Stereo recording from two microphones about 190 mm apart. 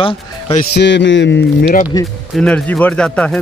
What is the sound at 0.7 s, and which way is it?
Speech, 70° left (ahead or behind).